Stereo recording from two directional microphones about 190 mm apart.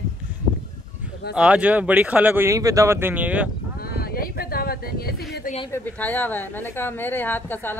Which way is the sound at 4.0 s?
50° left (ahead or behind).